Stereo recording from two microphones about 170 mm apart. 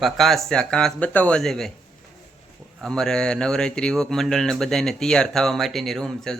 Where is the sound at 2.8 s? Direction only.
5° left (ahead or behind).